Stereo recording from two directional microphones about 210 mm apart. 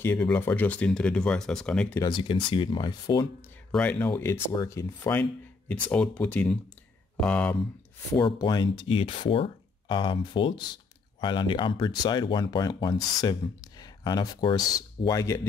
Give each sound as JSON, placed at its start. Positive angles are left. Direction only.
{"t": 0.0, "sound": "speech", "side_deg": 10}
{"t": 2.0, "sound": "speech", "side_deg": 20}
{"t": 3.7, "sound": "speech", "side_deg": 5}
{"t": 8.1, "sound": "speech", "side_deg": 20}